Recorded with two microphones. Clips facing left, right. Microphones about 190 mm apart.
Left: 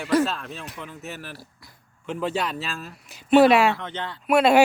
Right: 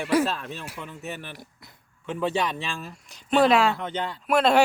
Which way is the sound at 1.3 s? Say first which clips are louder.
Left 1 dB; 20° right (ahead or behind).